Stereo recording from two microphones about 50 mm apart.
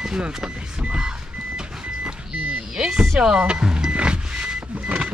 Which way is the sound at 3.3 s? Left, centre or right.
Centre.